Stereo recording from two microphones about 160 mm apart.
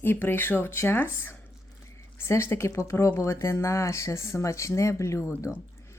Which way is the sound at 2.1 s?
15° left (ahead or behind).